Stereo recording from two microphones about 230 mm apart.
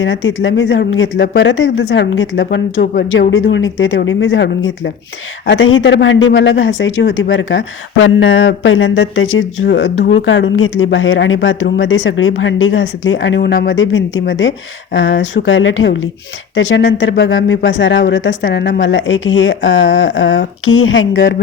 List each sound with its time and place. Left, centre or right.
0.0 s speech: left
2.7 s speech: left
3.1 s speech: left